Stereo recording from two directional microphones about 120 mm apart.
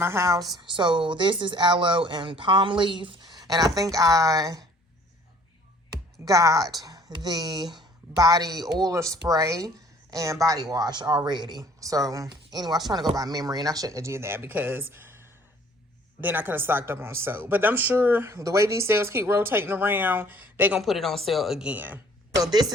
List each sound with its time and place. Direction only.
0.0 s speech: 20° right (ahead or behind)
0.5 s speech: 40° right (ahead or behind)
6.2 s a woman's voice: 30° right (ahead or behind)
16.2 s a woman's voice: 15° right (ahead or behind)
20.7 s a woman's voice: centre (ahead or behind)
22.4 s speech: 35° right (ahead or behind)